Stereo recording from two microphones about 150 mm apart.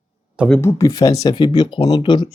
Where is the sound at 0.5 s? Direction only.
20° left (ahead or behind).